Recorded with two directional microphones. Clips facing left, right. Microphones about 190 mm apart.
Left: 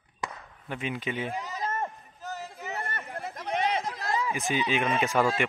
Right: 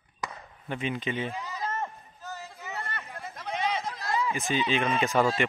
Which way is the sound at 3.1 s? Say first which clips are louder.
Left 4 dB; 60° left (ahead or behind).